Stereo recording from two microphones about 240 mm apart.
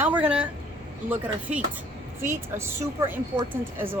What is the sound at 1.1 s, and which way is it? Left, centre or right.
Speech, centre.